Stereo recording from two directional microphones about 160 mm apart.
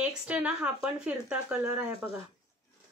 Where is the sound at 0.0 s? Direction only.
5° right (ahead or behind).